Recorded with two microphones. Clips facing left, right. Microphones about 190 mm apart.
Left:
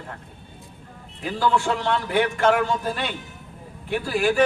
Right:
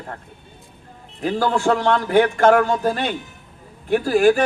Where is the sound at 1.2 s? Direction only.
45° right (ahead or behind).